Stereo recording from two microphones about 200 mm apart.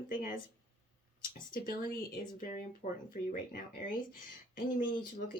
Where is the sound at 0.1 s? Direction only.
45° left (ahead or behind).